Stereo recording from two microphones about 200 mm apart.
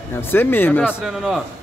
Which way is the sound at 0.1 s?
10° left (ahead or behind).